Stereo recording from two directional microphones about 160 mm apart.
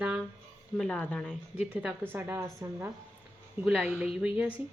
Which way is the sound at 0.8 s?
5° left (ahead or behind).